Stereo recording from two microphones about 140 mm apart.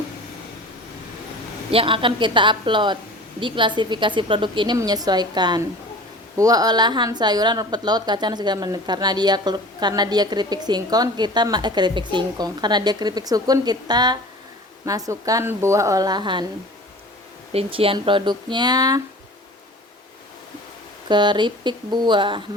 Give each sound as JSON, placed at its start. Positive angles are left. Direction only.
{"t": 1.7, "sound": "a woman's voice", "side_deg": -40}
{"t": 17.5, "sound": "speech", "side_deg": -45}
{"t": 21.1, "sound": "speech", "side_deg": -35}